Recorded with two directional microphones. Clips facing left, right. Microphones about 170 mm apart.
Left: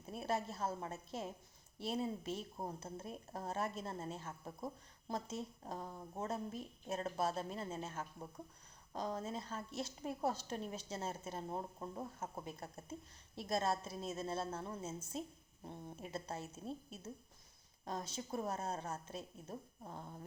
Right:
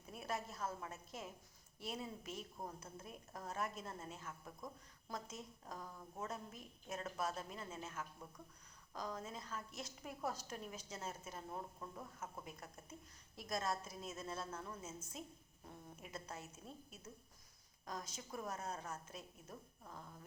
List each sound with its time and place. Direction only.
0.0 s a woman's voice: 30° left (ahead or behind)